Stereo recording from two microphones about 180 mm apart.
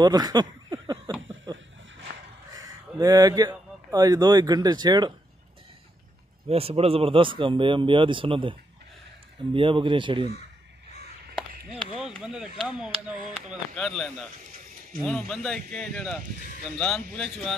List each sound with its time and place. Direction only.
0.0 s a sound: 20° right (ahead or behind)
2.6 s speech: 20° right (ahead or behind)
6.5 s speech: 35° right (ahead or behind)
12.2 s speech: 5° right (ahead or behind)